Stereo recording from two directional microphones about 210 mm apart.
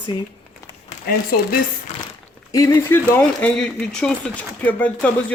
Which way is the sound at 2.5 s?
15° left (ahead or behind).